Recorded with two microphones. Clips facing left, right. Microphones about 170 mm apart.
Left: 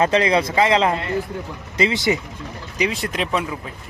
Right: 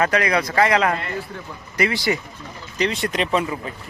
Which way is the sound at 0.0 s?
25° left (ahead or behind).